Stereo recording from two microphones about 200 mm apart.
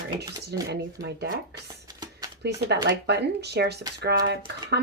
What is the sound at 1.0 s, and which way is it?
Speech, 50° right (ahead or behind).